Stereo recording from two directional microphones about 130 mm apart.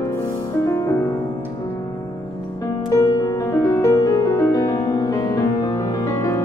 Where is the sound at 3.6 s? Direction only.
25° left (ahead or behind).